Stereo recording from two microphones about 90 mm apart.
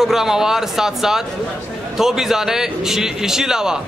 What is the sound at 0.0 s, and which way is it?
A man's voice, 5° right (ahead or behind).